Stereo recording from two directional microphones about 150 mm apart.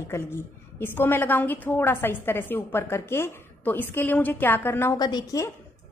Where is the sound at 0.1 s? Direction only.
15° left (ahead or behind).